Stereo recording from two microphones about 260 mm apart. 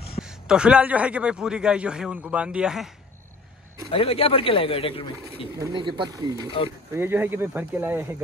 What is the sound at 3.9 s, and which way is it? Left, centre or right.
Speech, left.